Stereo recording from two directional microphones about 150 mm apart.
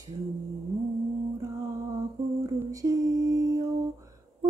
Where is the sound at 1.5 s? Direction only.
20° right (ahead or behind).